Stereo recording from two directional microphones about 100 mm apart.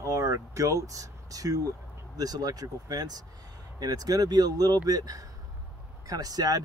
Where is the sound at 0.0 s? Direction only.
35° right (ahead or behind).